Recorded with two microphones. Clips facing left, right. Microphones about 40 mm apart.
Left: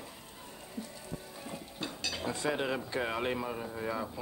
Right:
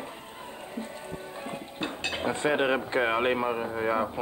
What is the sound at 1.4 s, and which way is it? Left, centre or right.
Speech, right.